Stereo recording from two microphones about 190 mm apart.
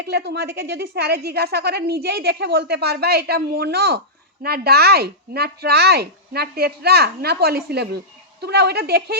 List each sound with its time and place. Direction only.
0.0 s speech: 60° right (ahead or behind)